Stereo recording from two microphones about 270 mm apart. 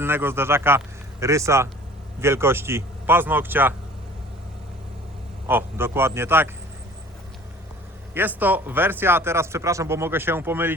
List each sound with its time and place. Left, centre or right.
0.0 s speech: centre
5.5 s speech: centre
8.1 s speech: centre